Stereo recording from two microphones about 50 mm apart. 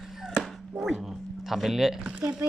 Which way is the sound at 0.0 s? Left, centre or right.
Centre.